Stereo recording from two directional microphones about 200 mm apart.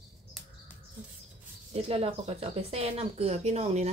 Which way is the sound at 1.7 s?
30° right (ahead or behind).